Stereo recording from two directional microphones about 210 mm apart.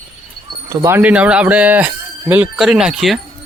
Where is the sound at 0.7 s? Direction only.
10° right (ahead or behind).